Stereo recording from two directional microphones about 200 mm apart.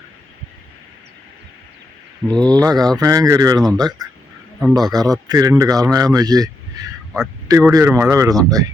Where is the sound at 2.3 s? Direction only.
20° right (ahead or behind).